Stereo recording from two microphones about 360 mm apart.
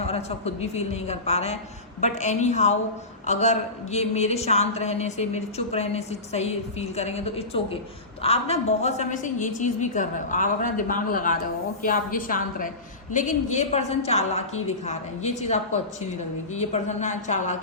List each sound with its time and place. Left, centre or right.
0.0 s a woman's voice: centre